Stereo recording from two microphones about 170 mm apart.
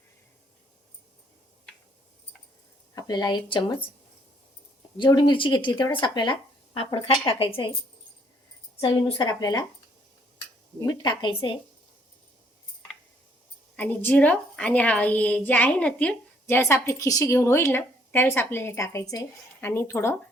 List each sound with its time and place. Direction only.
2.9 s speech: 25° left (ahead or behind)
4.9 s speech: 25° left (ahead or behind)
8.8 s speech: 25° left (ahead or behind)
11.0 s speech: 25° left (ahead or behind)
13.7 s a woman's voice: 10° left (ahead or behind)